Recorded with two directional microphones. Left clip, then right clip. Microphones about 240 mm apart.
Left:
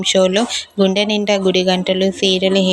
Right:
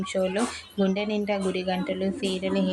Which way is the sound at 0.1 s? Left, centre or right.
Left.